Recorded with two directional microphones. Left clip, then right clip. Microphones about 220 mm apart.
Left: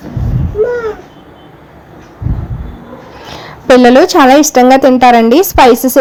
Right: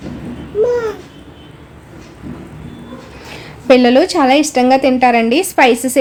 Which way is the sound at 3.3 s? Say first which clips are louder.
Left 4 dB; 20° left (ahead or behind).